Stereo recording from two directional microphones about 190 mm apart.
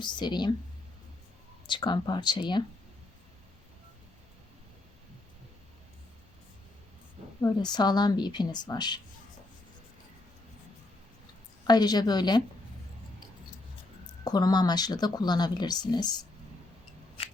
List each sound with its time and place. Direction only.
0.0 s speech: 25° left (ahead or behind)
1.6 s speech: 25° left (ahead or behind)
7.4 s speech: 20° left (ahead or behind)
11.6 s speech: 20° left (ahead or behind)
14.3 s speech: 20° left (ahead or behind)